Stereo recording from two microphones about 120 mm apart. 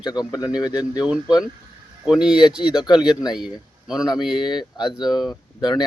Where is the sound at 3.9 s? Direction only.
5° right (ahead or behind).